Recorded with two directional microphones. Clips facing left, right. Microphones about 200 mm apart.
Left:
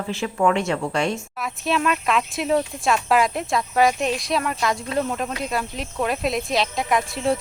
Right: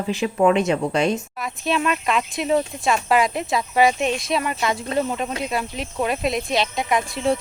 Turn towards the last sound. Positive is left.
turn(degrees=0)  # may be behind; listen again after turning